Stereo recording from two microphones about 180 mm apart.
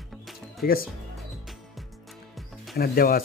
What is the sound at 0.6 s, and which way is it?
Speech, 55° left (ahead or behind).